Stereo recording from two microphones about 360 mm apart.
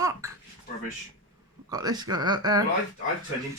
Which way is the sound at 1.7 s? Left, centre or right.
Centre.